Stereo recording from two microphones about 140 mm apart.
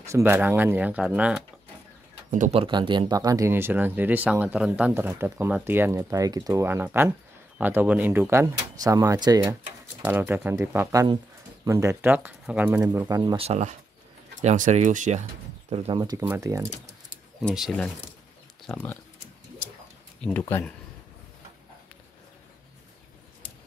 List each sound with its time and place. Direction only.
0.0 s speech: 20° right (ahead or behind)
2.5 s speech: 40° right (ahead or behind)
10.0 s speech: 15° right (ahead or behind)
13.1 s speech: 30° right (ahead or behind)
13.4 s speech: 50° right (ahead or behind)
15.9 s speech: 30° right (ahead or behind)
17.4 s speech: centre (ahead or behind)
18.7 s speech: 15° left (ahead or behind)
20.3 s speech: 15° left (ahead or behind)